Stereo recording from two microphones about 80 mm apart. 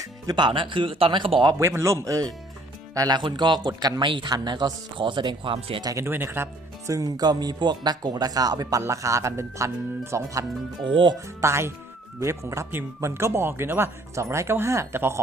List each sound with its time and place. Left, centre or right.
0.3 s speech: right
1.5 s speech: right
3.2 s speech: right
4.0 s speech: right
6.0 s speech: right
6.9 s speech: right
10.8 s speech: right
11.3 s speech: right